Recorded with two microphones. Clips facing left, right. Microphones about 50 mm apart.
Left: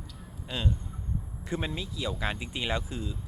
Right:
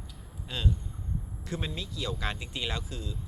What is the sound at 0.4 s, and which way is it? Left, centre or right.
Speech, centre.